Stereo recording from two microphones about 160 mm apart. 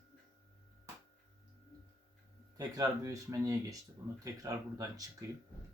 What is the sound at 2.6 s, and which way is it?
Speech, 20° right (ahead or behind).